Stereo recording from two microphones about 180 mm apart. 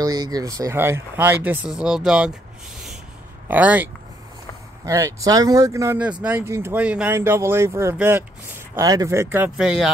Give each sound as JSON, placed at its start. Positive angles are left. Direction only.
{"t": 0.0, "sound": "speech", "side_deg": -20}
{"t": 3.4, "sound": "speech", "side_deg": -10}